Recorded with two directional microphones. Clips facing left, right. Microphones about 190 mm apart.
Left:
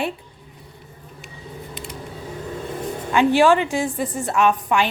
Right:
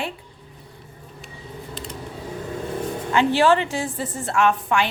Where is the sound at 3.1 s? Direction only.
15° left (ahead or behind).